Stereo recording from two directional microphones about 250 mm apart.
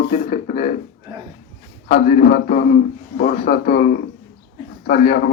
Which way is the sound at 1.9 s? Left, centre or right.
Left.